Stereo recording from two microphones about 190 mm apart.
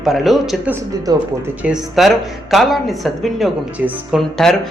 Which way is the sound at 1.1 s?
20° right (ahead or behind).